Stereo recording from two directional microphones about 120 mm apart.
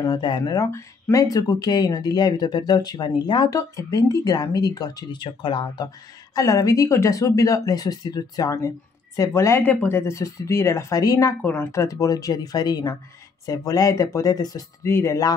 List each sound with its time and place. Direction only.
0.0 s speech: 35° left (ahead or behind)
6.3 s speech: 30° left (ahead or behind)
11.4 s speech: 15° left (ahead or behind)